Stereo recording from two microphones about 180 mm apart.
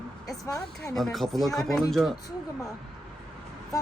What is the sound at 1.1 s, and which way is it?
Speech, centre (ahead or behind).